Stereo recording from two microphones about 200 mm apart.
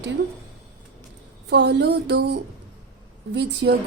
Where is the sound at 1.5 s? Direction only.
60° right (ahead or behind).